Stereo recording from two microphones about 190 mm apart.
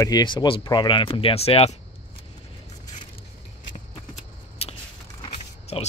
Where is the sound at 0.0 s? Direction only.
20° left (ahead or behind).